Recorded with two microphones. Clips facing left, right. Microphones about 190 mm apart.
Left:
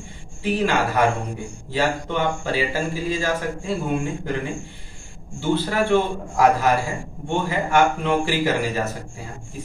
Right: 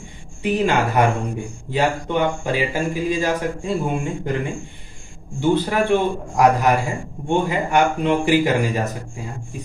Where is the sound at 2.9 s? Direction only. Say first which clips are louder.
Right 3 dB; 15° right (ahead or behind).